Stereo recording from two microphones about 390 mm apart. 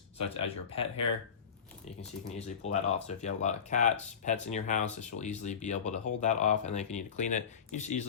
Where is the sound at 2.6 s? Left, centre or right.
Centre.